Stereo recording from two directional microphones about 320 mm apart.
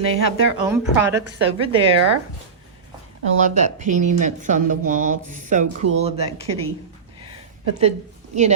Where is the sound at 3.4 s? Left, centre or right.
Right.